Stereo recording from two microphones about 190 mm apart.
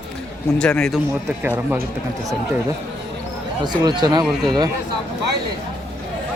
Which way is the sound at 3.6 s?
20° right (ahead or behind).